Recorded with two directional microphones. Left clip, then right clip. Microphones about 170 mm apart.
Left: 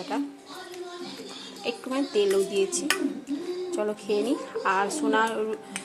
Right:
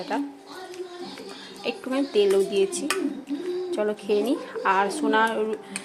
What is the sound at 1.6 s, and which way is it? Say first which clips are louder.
Speech: right 2 dB; 20° right (ahead or behind).